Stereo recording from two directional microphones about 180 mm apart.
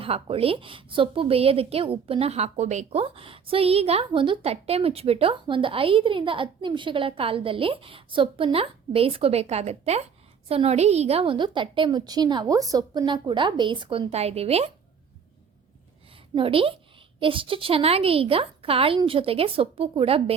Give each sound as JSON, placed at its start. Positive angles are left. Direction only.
{"t": 0.0, "sound": "a woman's voice", "side_deg": -30}
{"t": 16.3, "sound": "a woman's voice", "side_deg": -30}